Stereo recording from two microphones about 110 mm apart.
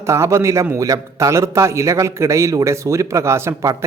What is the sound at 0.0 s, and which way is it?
A man's voice, 25° right (ahead or behind).